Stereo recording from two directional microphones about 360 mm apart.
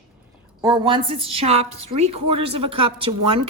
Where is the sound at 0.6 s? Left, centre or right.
Centre.